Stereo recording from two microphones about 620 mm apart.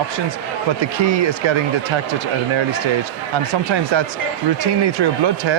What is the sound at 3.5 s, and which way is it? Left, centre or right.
Speech, right.